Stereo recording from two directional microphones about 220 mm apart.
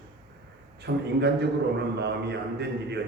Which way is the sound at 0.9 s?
50° right (ahead or behind).